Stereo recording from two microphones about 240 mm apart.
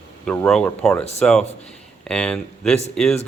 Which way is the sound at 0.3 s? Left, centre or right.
Centre.